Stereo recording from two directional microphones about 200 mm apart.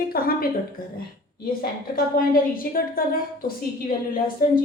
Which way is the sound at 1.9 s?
45° left (ahead or behind).